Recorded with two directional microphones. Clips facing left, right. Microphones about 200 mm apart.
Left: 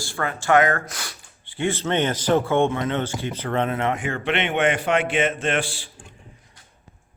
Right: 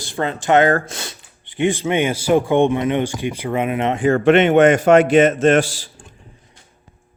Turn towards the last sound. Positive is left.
turn(degrees=-40)  # may be behind; listen again after turning